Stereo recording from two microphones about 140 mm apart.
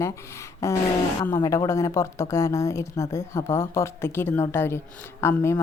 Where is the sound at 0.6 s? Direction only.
20° left (ahead or behind).